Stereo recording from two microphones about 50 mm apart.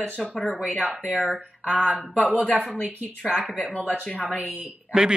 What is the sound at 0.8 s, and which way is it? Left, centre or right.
Speech, right.